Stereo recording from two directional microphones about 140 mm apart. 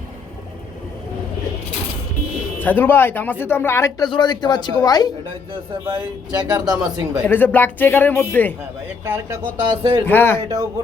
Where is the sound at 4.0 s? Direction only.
30° left (ahead or behind).